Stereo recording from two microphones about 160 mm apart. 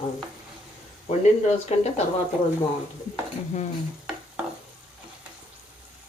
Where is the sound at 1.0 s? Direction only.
45° left (ahead or behind).